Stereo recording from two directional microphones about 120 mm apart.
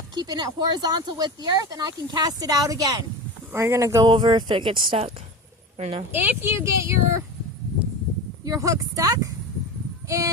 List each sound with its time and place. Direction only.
0.1 s speech: 35° right (ahead or behind)
4.0 s speech: 40° right (ahead or behind); by 6.0 s 55° right (ahead or behind)
6.1 s speech: 15° right (ahead or behind)
8.4 s speech: 30° right (ahead or behind)